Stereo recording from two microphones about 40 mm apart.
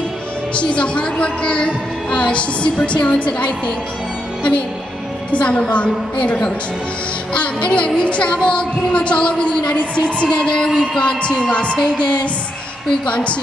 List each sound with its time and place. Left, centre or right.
0.6 s a woman's voice: left
5.3 s a woman's voice: left
13.0 s a woman's voice: left